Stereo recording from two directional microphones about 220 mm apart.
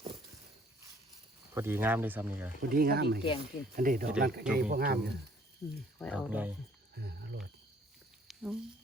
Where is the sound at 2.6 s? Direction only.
40° right (ahead or behind).